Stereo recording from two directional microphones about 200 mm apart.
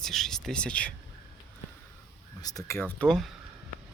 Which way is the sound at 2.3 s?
20° left (ahead or behind).